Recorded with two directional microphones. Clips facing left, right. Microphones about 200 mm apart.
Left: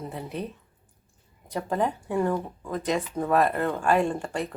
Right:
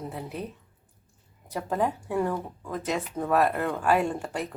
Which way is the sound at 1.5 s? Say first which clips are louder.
Left 1 dB; 5° right (ahead or behind).